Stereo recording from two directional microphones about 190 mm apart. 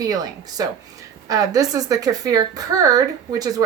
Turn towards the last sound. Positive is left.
turn(degrees=-20)  # may be behind; listen again after turning